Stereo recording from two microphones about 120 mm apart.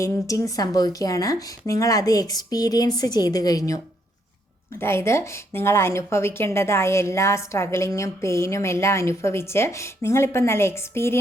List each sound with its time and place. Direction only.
0.0 s speech: 30° left (ahead or behind)
4.8 s a woman's voice: 20° left (ahead or behind)